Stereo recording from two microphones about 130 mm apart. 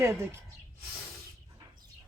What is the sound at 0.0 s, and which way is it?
Speech, 20° right (ahead or behind).